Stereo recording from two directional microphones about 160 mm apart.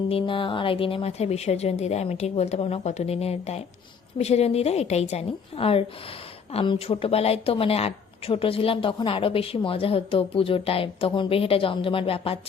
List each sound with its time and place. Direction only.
0.1 s speech: 35° left (ahead or behind)